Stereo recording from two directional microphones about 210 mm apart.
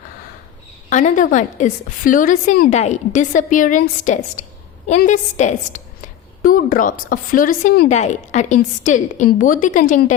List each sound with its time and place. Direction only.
0.9 s a woman's voice: 35° left (ahead or behind)